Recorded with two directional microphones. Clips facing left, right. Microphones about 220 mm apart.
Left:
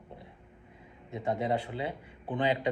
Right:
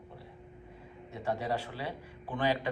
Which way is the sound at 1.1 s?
20° left (ahead or behind).